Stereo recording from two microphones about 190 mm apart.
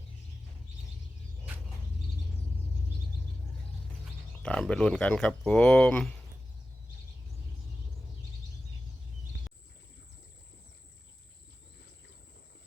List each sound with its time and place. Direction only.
4.4 s speech: 5° left (ahead or behind)